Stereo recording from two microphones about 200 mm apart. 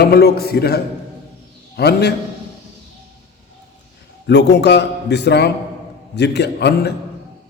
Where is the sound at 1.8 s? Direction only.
55° left (ahead or behind).